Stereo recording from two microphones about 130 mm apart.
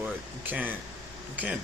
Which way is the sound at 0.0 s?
10° right (ahead or behind).